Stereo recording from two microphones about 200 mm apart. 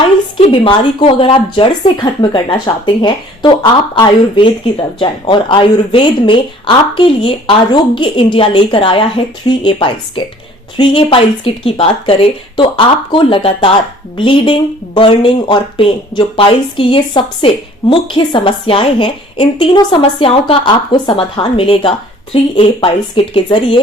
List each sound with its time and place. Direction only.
0.3 s speech: 25° left (ahead or behind)